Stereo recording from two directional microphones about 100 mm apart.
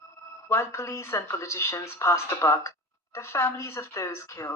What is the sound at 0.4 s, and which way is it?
Speech, 25° left (ahead or behind).